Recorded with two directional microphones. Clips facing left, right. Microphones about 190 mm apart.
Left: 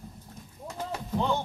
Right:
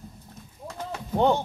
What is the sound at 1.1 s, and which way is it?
Speech, 65° right (ahead or behind).